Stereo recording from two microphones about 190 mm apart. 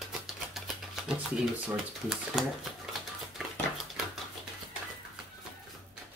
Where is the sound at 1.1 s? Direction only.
5° right (ahead or behind).